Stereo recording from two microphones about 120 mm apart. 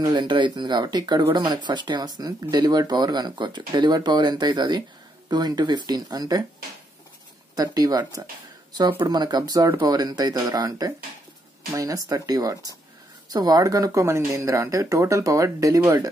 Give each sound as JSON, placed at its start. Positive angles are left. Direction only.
{"t": 0.0, "sound": "speech", "side_deg": -40}
{"t": 7.5, "sound": "speech", "side_deg": -30}